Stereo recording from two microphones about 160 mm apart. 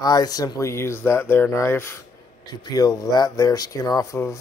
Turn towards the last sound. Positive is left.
turn(degrees=20)  # may be behind; listen again after turning